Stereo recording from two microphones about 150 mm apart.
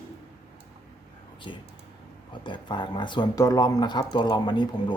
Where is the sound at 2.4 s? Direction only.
30° left (ahead or behind).